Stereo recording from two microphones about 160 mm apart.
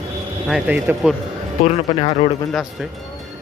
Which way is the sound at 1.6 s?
35° left (ahead or behind).